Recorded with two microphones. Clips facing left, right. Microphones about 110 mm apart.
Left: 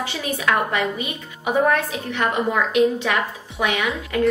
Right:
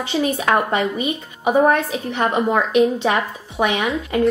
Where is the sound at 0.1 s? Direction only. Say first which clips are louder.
Right 6 dB; 30° right (ahead or behind).